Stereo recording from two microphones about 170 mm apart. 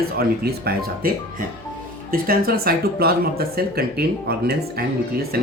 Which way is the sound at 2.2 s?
60° right (ahead or behind).